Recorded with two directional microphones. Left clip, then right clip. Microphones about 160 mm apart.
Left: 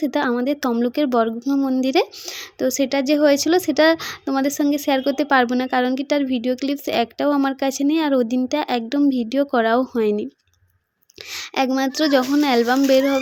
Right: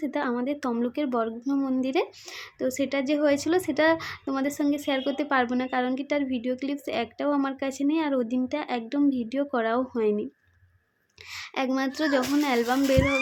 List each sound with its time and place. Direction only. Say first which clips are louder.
0.0 s a woman's voice: left 8 dB; 40° left (ahead or behind)
11.3 s a woman's voice: left 7 dB; 40° left (ahead or behind)